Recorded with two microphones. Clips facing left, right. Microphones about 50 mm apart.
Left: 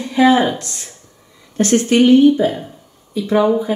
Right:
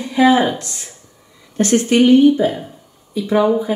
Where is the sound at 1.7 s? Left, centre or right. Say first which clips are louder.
Even; left.